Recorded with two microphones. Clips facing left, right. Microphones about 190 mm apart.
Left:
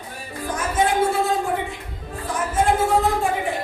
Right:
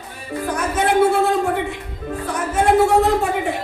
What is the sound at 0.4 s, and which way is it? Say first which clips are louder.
Music: right 2 dB; 65° right (ahead or behind).